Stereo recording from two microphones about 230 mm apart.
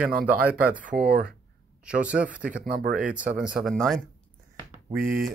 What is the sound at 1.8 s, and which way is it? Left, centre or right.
Speech, centre.